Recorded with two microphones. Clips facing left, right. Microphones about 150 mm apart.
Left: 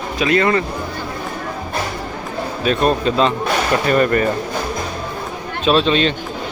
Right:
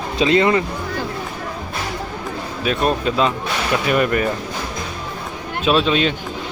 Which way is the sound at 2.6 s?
5° right (ahead or behind).